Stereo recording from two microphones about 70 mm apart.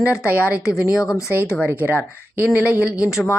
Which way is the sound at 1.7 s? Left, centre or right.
Right.